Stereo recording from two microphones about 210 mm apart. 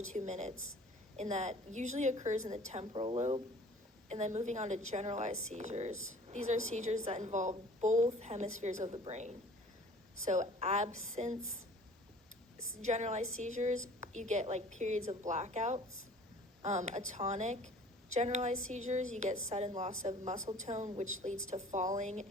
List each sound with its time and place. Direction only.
0.1 s a woman's voice: 35° right (ahead or behind)
12.8 s a woman's voice: 35° right (ahead or behind)
20.3 s a woman's voice: 15° right (ahead or behind)
20.7 s a woman's voice: 35° right (ahead or behind)